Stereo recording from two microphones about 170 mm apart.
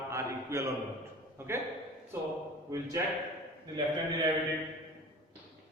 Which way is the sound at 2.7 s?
20° right (ahead or behind).